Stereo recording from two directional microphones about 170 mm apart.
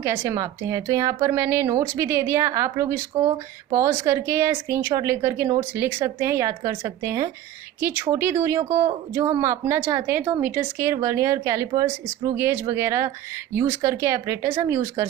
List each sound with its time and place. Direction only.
0.0 s speech: 15° right (ahead or behind)